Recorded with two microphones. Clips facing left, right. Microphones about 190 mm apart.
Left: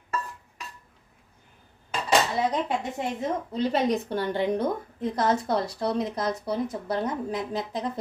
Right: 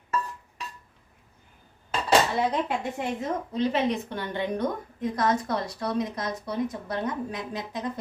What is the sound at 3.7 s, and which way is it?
A woman's voice, 40° left (ahead or behind).